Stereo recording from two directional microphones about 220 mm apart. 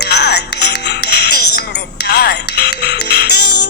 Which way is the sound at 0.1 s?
50° left (ahead or behind).